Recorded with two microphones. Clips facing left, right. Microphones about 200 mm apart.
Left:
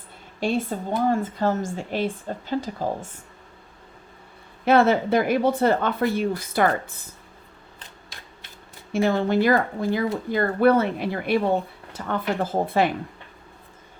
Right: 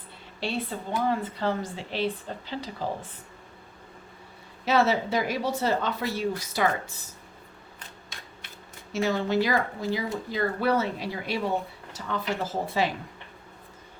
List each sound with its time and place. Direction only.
0.3 s a woman's voice: 50° left (ahead or behind)
4.6 s speech: 55° left (ahead or behind)
8.9 s speech: 55° left (ahead or behind)